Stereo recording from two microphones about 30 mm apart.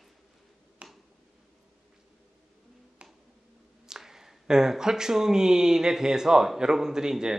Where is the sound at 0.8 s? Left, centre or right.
Right.